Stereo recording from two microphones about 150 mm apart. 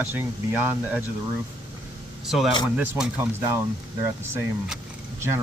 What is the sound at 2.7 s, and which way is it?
Speech, 10° right (ahead or behind).